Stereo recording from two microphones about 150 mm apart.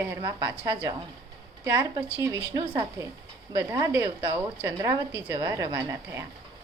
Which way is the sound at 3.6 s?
20° right (ahead or behind).